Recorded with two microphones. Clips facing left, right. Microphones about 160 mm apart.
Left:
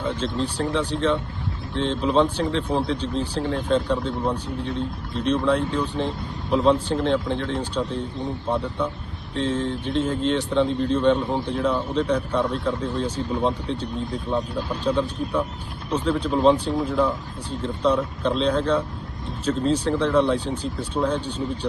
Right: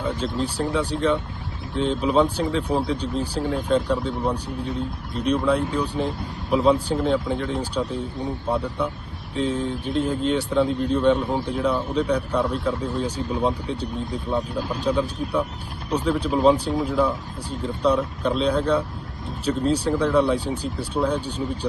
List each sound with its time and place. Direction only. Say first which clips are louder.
0.2 s speech: even; 5° right (ahead or behind)
14.9 s speech: even; 15° right (ahead or behind)
15.9 s speech: even; 5° right (ahead or behind)
21.2 s speech: even; 35° right (ahead or behind)